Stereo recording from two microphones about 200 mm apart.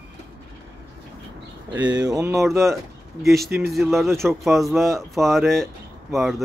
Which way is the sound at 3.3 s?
50° right (ahead or behind).